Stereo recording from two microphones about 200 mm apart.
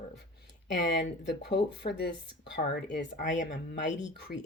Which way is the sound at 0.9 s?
55° left (ahead or behind).